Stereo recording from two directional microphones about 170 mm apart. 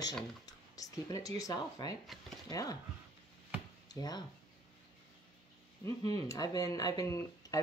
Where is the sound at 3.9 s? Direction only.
20° left (ahead or behind).